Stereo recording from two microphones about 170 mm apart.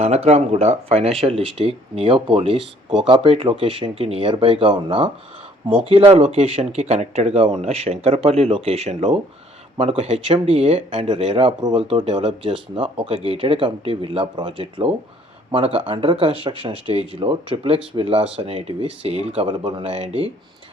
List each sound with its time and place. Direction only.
0.0 s speech: 40° right (ahead or behind)